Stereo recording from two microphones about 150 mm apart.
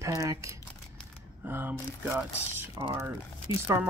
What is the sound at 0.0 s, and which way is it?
Speech, 20° right (ahead or behind).